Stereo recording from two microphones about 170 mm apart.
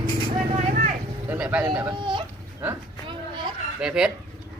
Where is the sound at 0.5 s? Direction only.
50° right (ahead or behind).